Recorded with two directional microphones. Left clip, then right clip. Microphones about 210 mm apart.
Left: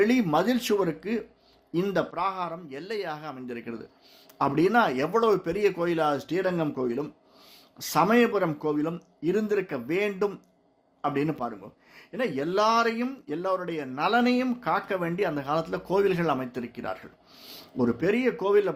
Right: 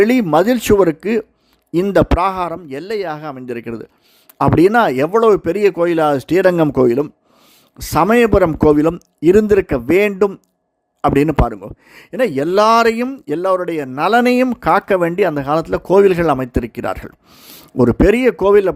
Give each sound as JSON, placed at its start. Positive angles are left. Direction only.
{"t": 0.0, "sound": "speech", "side_deg": -55}